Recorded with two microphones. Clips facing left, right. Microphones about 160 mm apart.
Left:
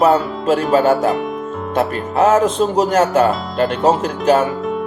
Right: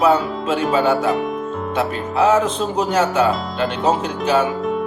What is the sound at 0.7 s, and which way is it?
Speech, 50° left (ahead or behind).